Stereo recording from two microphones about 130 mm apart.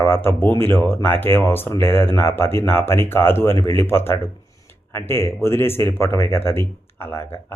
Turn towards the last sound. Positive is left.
turn(degrees=20)  # may be behind; listen again after turning